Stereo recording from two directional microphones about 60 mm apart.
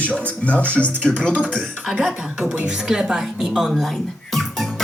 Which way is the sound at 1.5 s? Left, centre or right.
Centre.